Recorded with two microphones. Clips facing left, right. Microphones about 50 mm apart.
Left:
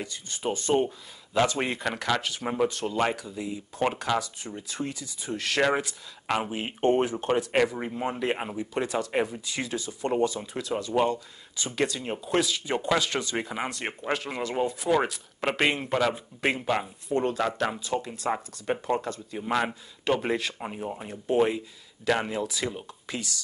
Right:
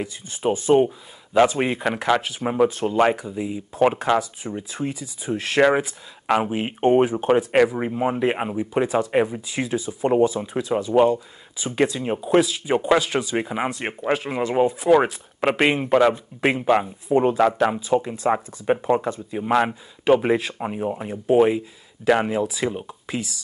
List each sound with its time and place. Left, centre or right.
0.0 s speech: centre